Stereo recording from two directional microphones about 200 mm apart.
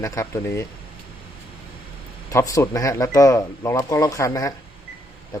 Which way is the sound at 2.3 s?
15° left (ahead or behind).